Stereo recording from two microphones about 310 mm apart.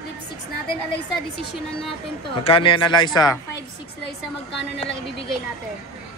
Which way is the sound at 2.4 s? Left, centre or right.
Centre.